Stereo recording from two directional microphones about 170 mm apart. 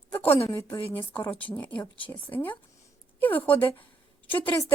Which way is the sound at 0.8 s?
35° left (ahead or behind).